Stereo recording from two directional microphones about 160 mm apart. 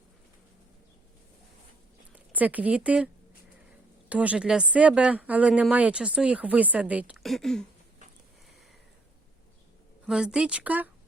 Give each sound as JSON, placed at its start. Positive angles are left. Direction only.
{"t": 2.1, "sound": "speech", "side_deg": -10}
{"t": 4.1, "sound": "speech", "side_deg": -10}
{"t": 7.2, "sound": "speech", "side_deg": 0}
{"t": 10.1, "sound": "speech", "side_deg": -5}